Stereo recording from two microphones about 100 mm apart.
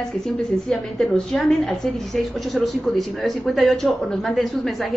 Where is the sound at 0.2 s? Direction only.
5° left (ahead or behind).